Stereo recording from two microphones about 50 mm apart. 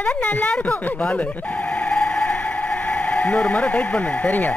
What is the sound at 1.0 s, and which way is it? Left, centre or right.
Sonar, left.